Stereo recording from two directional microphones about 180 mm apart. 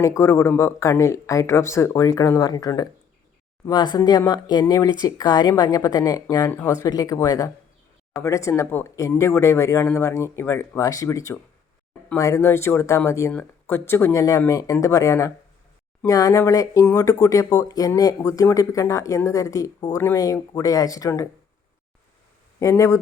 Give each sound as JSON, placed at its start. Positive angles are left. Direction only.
{"t": 0.0, "sound": "speech", "side_deg": 15}
{"t": 3.9, "sound": "speech", "side_deg": 20}
{"t": 22.6, "sound": "speech", "side_deg": 15}